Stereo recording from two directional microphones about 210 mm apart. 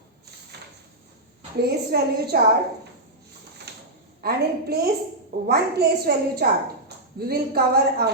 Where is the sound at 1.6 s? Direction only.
50° right (ahead or behind).